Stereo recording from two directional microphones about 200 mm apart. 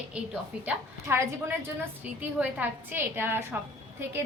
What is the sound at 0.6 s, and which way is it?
A woman's voice, 10° right (ahead or behind).